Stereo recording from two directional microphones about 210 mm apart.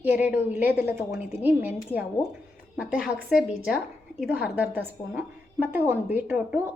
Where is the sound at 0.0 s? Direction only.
10° right (ahead or behind).